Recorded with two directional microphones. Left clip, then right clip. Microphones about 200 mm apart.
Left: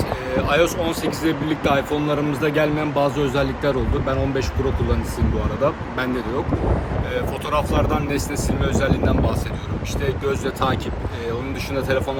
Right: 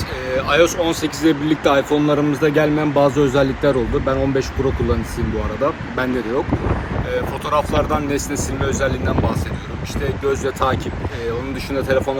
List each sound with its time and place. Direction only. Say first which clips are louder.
0.3 s speech: right 4 dB; 10° left (ahead or behind)
5.6 s speech: right 1 dB; 10° left (ahead or behind)
7.1 s speech: right 4 dB; 10° left (ahead or behind)